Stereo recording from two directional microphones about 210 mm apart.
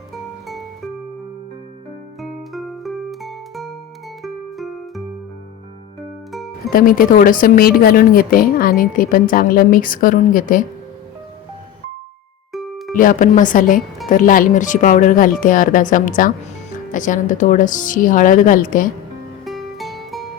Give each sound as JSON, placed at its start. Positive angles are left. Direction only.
{"t": 2.2, "sound": "music", "side_deg": 0}
{"t": 6.7, "sound": "speech", "side_deg": 40}
{"t": 12.9, "sound": "speech", "side_deg": 40}
{"t": 19.5, "sound": "music", "side_deg": 0}